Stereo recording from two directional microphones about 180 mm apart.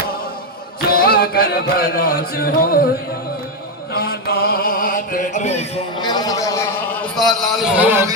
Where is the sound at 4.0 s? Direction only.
55° left (ahead or behind); by 5.7 s 40° left (ahead or behind).